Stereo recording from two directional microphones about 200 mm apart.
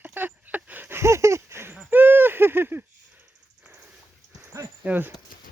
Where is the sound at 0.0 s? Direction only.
10° right (ahead or behind).